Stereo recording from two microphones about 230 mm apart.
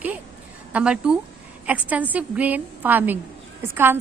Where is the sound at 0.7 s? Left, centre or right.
Centre.